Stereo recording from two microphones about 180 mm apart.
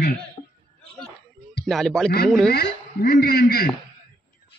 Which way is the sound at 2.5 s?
65° left (ahead or behind).